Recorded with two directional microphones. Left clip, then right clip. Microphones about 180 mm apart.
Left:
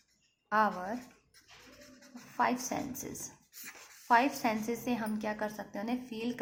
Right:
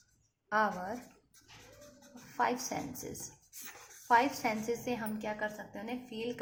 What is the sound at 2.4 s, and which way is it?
Speech, 10° left (ahead or behind).